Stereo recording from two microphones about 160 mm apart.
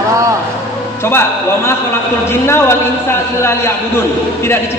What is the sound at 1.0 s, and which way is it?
A man's voice, 15° left (ahead or behind).